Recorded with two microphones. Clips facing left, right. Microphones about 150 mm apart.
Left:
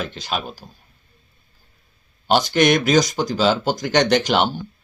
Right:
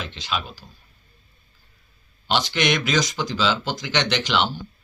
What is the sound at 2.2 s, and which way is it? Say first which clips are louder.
Speech: left 6 dB; 45° left (ahead or behind).